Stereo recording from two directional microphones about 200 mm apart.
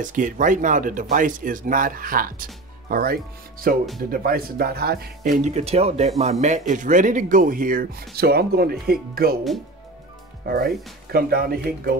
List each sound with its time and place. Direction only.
0.0 s speech: 40° right (ahead or behind)
10.4 s speech: 50° right (ahead or behind)